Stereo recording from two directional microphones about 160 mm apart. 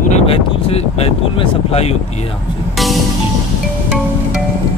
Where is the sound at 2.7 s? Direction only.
Centre (ahead or behind).